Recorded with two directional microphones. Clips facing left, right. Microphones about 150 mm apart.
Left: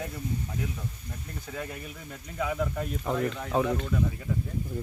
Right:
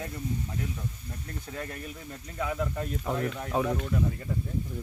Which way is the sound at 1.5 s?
5° left (ahead or behind).